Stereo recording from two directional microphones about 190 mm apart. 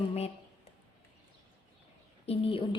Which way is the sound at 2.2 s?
30° left (ahead or behind).